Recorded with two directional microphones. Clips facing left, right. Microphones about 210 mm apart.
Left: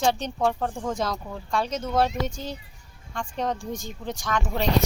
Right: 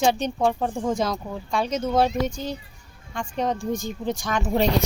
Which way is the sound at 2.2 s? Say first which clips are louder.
Right 4 dB; 5° left (ahead or behind).